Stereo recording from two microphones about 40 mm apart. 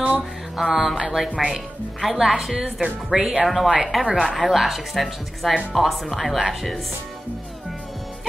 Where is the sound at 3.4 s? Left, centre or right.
Centre.